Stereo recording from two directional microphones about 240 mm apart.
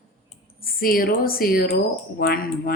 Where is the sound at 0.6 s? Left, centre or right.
Left.